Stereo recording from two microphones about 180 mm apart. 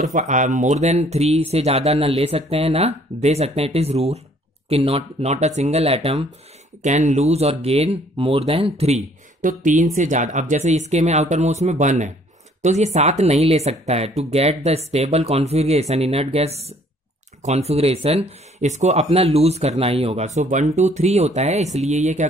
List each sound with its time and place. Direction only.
0.0 s speech: 45° right (ahead or behind)